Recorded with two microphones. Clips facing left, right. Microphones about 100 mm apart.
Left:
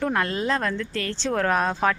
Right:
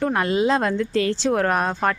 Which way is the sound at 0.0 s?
10° right (ahead or behind).